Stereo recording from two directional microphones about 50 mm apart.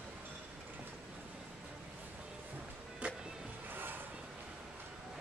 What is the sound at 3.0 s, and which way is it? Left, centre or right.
Music, right.